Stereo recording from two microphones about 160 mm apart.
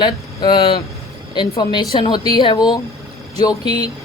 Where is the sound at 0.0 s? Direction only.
30° left (ahead or behind).